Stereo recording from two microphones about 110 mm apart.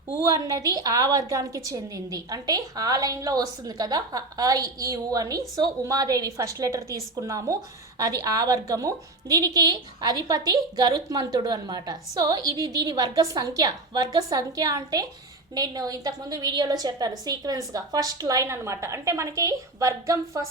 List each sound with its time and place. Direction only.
0.1 s a woman's voice: 30° right (ahead or behind)